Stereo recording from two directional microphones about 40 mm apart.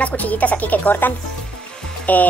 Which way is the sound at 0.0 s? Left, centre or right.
Left.